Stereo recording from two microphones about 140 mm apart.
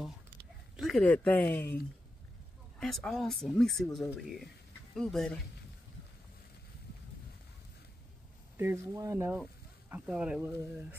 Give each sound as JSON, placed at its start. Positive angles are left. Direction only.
{"t": 0.7, "sound": "speech", "side_deg": 0}
{"t": 1.0, "sound": "speech", "side_deg": 10}
{"t": 2.8, "sound": "speech", "side_deg": 5}
{"t": 8.5, "sound": "speech", "side_deg": -20}